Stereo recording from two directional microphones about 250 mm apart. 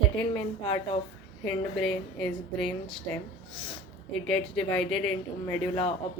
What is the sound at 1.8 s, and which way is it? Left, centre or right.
Speech, centre.